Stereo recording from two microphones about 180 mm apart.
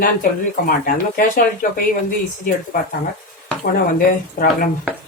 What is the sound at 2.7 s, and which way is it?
Speech, 50° left (ahead or behind).